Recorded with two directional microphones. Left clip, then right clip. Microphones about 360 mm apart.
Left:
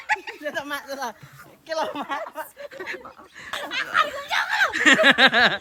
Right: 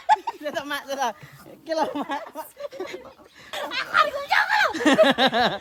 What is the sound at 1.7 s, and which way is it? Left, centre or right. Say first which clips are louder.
Speech: right 1 dB; right.